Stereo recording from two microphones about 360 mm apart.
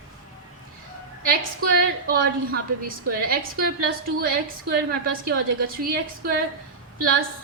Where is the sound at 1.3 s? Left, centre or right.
Right.